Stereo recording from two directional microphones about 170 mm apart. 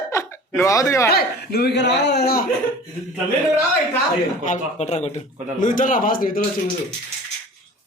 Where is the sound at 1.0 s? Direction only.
70° left (ahead or behind).